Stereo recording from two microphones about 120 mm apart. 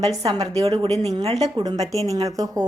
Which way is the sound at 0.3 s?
55° right (ahead or behind).